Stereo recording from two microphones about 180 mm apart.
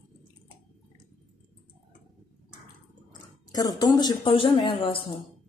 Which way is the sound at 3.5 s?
20° left (ahead or behind).